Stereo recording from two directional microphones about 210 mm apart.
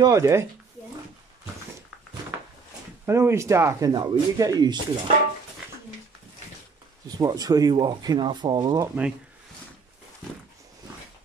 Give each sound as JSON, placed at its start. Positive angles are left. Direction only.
{"t": 0.0, "sound": "speech", "side_deg": -15}
{"t": 3.1, "sound": "speech", "side_deg": -15}
{"t": 7.1, "sound": "speech", "side_deg": -20}